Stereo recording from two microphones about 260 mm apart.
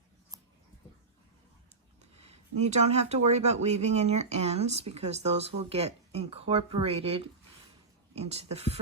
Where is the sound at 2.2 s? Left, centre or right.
Right.